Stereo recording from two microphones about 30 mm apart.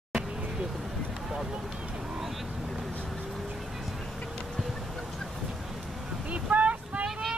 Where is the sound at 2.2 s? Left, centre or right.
Centre.